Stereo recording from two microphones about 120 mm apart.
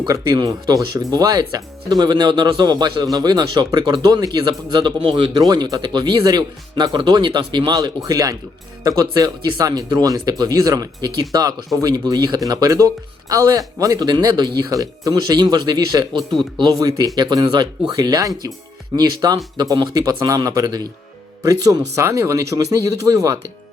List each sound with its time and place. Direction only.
0.1 s speech: 35° right (ahead or behind)
5.4 s speech: 30° right (ahead or behind)